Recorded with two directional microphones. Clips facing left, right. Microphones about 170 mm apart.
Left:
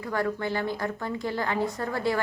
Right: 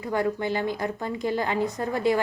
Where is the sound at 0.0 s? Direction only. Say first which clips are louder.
Right 2 dB; 20° right (ahead or behind).